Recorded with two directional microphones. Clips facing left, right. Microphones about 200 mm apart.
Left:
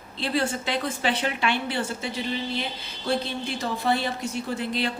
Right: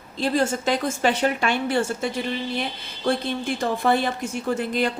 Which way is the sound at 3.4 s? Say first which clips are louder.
Right 4 dB; 50° right (ahead or behind).